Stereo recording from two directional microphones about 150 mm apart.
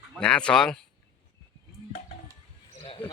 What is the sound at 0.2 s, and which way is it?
Speech, 5° left (ahead or behind).